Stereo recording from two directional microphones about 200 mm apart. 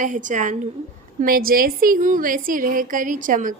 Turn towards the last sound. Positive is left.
turn(degrees=-40)  # may be behind; listen again after turning